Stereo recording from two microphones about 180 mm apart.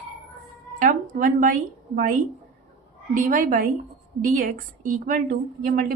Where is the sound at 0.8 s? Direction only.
50° right (ahead or behind).